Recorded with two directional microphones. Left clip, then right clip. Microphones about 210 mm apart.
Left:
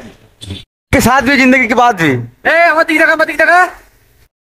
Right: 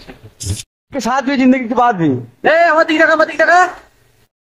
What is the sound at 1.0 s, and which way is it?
Speech, 55° left (ahead or behind).